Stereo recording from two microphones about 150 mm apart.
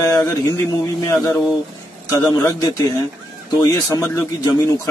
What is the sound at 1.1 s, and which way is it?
A man's voice, 20° left (ahead or behind).